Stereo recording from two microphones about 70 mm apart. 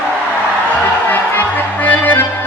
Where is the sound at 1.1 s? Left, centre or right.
Left.